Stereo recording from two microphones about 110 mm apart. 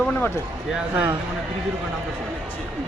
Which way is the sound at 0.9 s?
15° right (ahead or behind).